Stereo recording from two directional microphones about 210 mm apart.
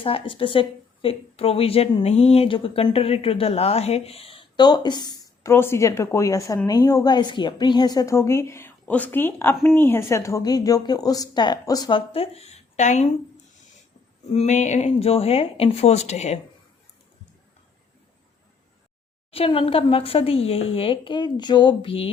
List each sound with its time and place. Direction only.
0.0 s a woman's voice: 25° left (ahead or behind)
19.3 s a woman's voice: 25° left (ahead or behind)